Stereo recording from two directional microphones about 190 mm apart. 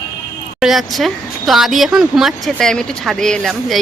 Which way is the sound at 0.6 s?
Centre (ahead or behind).